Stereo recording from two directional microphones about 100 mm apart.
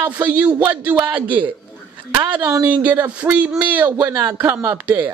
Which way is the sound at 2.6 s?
15° right (ahead or behind).